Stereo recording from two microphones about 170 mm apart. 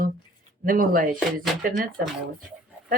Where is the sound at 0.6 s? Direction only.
55° right (ahead or behind).